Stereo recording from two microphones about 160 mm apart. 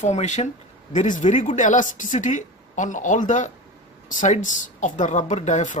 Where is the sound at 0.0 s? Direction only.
45° left (ahead or behind).